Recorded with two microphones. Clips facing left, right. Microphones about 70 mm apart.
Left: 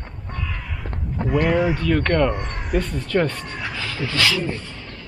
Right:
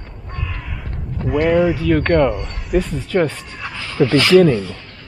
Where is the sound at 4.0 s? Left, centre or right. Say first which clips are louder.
Right 15 dB; right.